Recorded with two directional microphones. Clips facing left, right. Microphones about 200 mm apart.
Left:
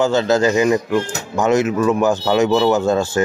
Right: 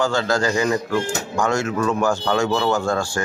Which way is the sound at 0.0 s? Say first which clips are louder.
Left 5 dB; 20° left (ahead or behind).